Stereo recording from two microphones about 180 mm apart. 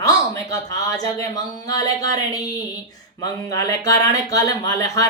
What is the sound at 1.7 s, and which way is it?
Speech, 20° left (ahead or behind).